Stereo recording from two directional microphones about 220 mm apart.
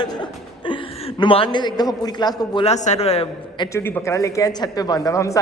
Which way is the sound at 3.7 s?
10° left (ahead or behind).